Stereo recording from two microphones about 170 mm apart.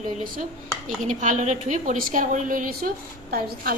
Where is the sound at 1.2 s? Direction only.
45° right (ahead or behind).